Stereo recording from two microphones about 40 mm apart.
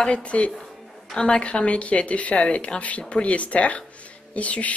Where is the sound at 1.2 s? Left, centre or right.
Left.